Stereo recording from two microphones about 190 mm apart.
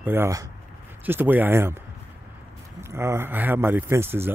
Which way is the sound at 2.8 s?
15° right (ahead or behind).